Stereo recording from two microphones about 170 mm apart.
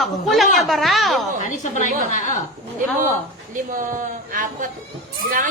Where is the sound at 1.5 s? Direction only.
45° left (ahead or behind).